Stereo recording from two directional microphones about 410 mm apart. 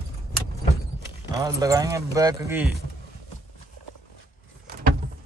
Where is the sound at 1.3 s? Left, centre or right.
Centre.